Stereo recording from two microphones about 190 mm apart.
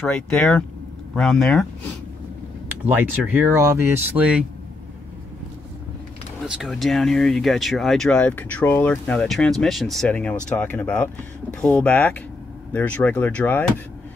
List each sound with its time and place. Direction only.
0.0 s speech: 5° left (ahead or behind)
2.8 s speech: 10° right (ahead or behind)
6.4 s speech: 5° right (ahead or behind)